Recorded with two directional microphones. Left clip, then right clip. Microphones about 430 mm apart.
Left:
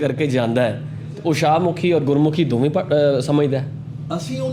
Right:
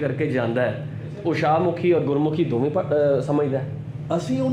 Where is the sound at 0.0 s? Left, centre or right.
Left.